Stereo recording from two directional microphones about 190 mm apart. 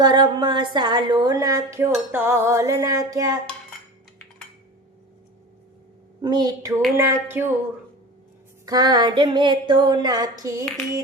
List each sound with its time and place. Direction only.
0.0 s a woman's voice: 20° right (ahead or behind)
6.2 s a woman's voice: 20° right (ahead or behind)
6.9 s a sound: 15° right (ahead or behind)
8.6 s a woman's voice: 20° right (ahead or behind)